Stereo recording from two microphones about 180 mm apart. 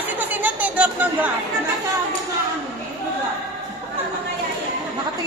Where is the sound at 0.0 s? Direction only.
10° right (ahead or behind).